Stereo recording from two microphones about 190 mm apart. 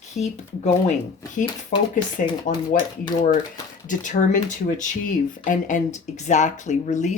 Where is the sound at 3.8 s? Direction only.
40° left (ahead or behind).